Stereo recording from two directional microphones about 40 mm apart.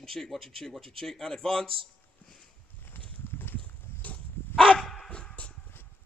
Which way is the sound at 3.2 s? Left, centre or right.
Left.